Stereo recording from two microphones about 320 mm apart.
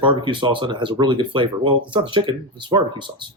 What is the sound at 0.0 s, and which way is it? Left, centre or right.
Speech, centre.